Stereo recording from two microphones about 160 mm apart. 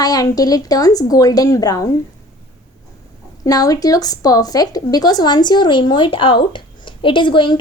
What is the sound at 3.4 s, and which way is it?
A woman's voice, 25° left (ahead or behind).